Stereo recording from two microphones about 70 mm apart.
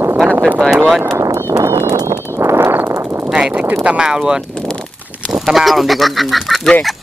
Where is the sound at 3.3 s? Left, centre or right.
Centre.